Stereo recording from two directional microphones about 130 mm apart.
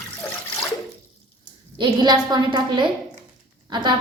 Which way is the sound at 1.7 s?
35° right (ahead or behind).